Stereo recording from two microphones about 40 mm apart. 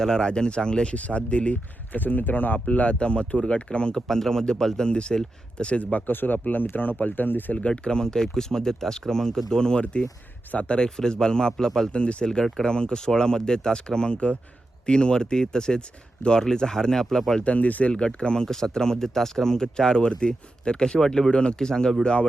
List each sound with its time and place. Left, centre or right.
0.0 s speech: centre
0.9 s speech: left
2.0 s speech: left
4.1 s speech: centre; by 6.0 s left
6.1 s speech: left
7.7 s speech: centre
10.5 s speech: left
10.8 s speech: centre
11.9 s speech: left; by 17.4 s centre
17.4 s speech: left
17.9 s speech: left
18.4 s speech: centre